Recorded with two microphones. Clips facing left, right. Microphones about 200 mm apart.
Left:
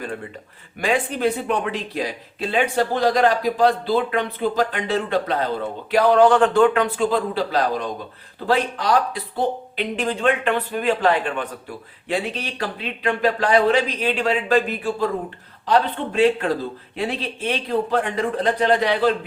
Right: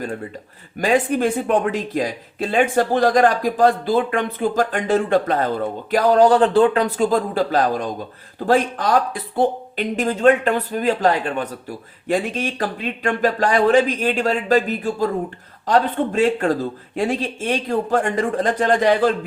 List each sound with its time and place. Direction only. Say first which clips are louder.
0.8 s speech: right 4 dB; 40° right (ahead or behind)